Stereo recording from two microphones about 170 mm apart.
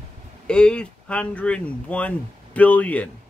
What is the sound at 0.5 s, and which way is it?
Speech, 5° left (ahead or behind).